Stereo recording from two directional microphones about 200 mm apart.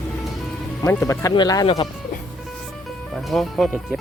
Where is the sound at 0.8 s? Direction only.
15° left (ahead or behind).